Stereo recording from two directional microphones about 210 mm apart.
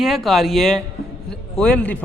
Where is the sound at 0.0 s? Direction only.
Centre (ahead or behind).